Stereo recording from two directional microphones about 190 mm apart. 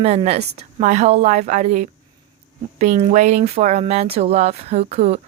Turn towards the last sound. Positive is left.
turn(degrees=-35)  # may be behind; listen again after turning